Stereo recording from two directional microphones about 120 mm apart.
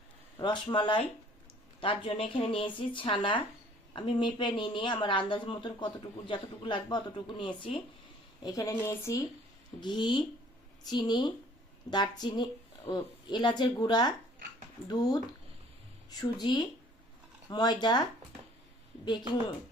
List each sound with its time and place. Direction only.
0.3 s a woman's voice: 40° left (ahead or behind)
8.4 s speech: 30° left (ahead or behind)
9.8 s speech: 40° left (ahead or behind)
19.0 s speech: 40° left (ahead or behind)